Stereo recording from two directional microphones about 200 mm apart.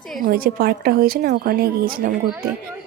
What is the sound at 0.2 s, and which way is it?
A woman's voice, 45° right (ahead or behind).